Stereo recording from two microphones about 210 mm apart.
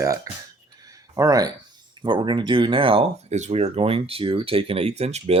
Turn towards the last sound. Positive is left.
turn(degrees=-30)  # may be behind; listen again after turning